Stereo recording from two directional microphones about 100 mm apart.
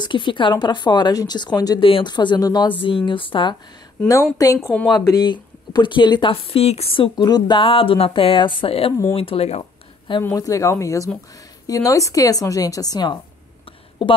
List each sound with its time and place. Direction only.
0.0 s a woman's voice: 55° left (ahead or behind)
1.8 s a woman's voice: 60° left (ahead or behind); by 2.7 s 45° left (ahead or behind)
2.8 s a woman's voice: 60° left (ahead or behind)
4.4 s a woman's voice: 40° left (ahead or behind)
6.3 s speech: 85° left
7.2 s a woman's voice: 45° left (ahead or behind); by 9.7 s 80° left
10.3 s a woman's voice: 35° left (ahead or behind)
14.0 s a woman's voice: 55° left (ahead or behind)